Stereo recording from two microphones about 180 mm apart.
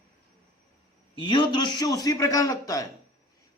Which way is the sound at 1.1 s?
25° left (ahead or behind).